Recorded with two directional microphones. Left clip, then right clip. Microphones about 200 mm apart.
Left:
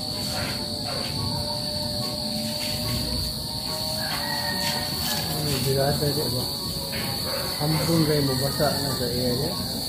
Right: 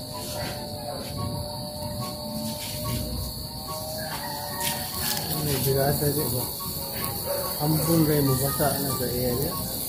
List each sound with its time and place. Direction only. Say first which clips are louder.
5.5 s speech: even; 40° right (ahead or behind)
7.8 s speech: even; 40° right (ahead or behind)